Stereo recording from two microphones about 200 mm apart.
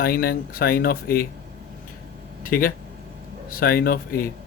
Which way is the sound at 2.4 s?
45° left (ahead or behind).